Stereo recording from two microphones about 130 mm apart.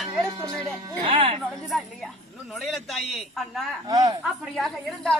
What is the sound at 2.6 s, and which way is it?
A woman's voice, centre (ahead or behind).